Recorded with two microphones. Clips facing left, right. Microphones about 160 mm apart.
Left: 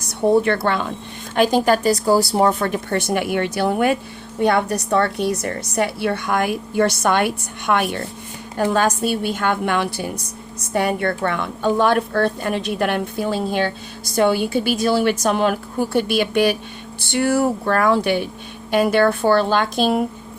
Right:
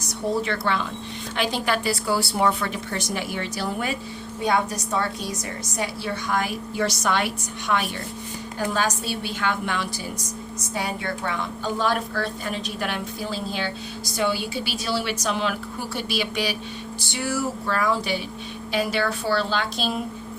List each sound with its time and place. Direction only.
0.3 s a woman's voice: 55° left (ahead or behind)